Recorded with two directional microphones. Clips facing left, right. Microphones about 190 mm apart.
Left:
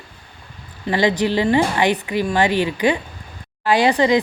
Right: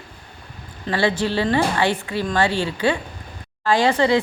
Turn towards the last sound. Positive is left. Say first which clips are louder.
# left 2 dB
turn(degrees=15)  # may be behind; listen again after turning